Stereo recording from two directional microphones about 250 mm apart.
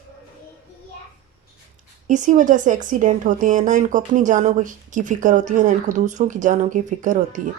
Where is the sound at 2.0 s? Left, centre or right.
Right.